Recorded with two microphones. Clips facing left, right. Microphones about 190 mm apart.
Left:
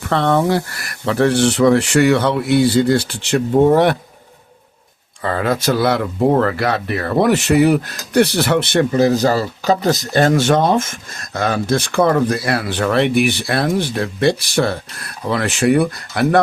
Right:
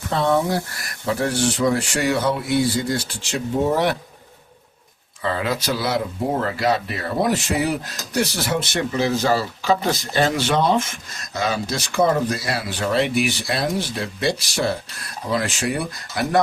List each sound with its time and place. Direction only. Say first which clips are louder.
0.1 s speech: left 4 dB; 70° left (ahead or behind); by 3.9 s 55° left (ahead or behind)
5.2 s speech: left 5 dB; 50° left (ahead or behind)